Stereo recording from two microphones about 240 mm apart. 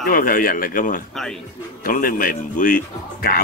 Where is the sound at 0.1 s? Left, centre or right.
Left.